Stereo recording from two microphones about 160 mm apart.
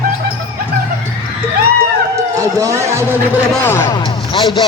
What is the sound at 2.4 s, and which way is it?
Speech, 20° right (ahead or behind).